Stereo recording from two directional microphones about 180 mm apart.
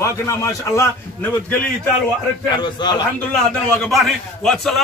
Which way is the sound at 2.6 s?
25° left (ahead or behind).